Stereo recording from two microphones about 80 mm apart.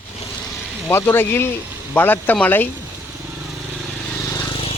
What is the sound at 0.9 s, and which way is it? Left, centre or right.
Speech, left.